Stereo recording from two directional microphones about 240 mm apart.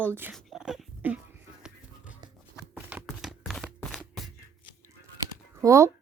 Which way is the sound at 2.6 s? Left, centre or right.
Centre.